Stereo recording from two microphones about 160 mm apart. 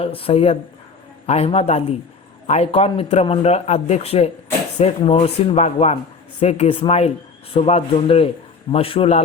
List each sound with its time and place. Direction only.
0.0 s speech: 35° left (ahead or behind)